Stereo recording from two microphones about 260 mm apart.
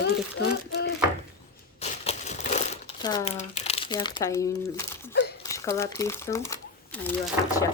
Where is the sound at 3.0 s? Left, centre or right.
Centre.